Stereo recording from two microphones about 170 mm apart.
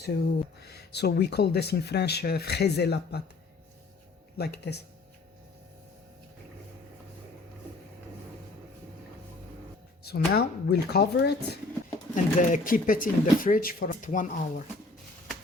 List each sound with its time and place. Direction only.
0.0 s speech: 75° left (ahead or behind)
4.4 s speech: 75° left (ahead or behind)
10.0 s speech: 70° left (ahead or behind)
12.1 s speech: 50° left (ahead or behind)